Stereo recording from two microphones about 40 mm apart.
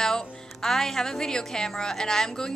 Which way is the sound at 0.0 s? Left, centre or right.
Centre.